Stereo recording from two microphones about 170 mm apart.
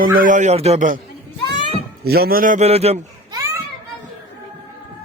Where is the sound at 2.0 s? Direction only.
65° right (ahead or behind).